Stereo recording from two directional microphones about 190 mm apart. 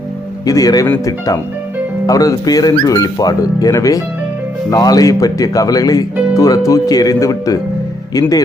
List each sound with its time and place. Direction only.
0.4 s speech: 20° left (ahead or behind)